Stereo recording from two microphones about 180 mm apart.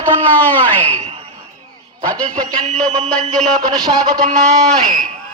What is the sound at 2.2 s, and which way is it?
Speech, 35° right (ahead or behind).